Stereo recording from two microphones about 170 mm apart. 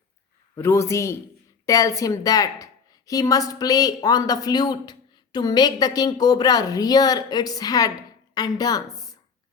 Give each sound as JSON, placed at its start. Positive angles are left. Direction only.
{"t": 0.5, "sound": "a man's voice", "side_deg": 15}